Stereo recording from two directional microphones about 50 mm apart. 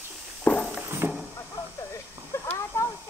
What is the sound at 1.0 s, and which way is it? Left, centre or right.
Vehicle, right.